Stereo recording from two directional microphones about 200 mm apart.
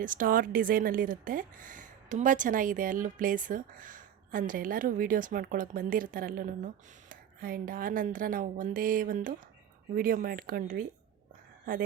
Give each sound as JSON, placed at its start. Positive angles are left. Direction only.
{"t": 0.0, "sound": "speech", "side_deg": -45}